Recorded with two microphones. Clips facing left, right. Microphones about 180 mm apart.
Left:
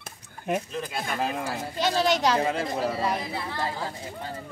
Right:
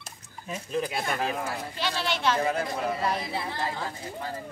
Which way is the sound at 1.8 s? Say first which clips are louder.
Left 8 dB; 40° left (ahead or behind).